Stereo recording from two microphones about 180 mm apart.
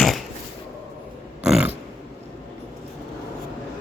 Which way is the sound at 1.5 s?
5° right (ahead or behind).